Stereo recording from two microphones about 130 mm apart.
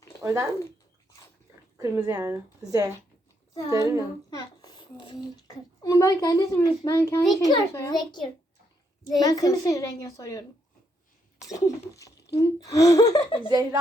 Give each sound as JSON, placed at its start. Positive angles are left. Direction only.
{"t": 0.2, "sound": "speech", "side_deg": -25}
{"t": 1.8, "sound": "a woman's voice", "side_deg": -25}
{"t": 4.3, "sound": "a child's voice", "side_deg": 30}
{"t": 5.8, "sound": "speech", "side_deg": 25}
{"t": 9.1, "sound": "speech", "side_deg": 30}
{"t": 11.4, "sound": "speech", "side_deg": 25}
{"t": 13.5, "sound": "a woman's voice", "side_deg": -35}